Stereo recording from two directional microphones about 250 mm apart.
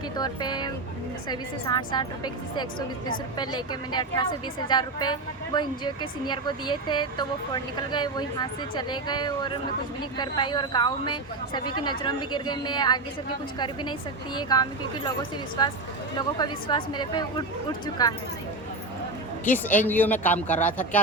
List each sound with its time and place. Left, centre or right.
0.2 s speech: centre
14.3 s speech: centre
19.5 s speech: centre